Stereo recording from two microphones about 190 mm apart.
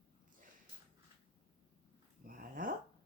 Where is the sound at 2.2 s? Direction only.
45° right (ahead or behind).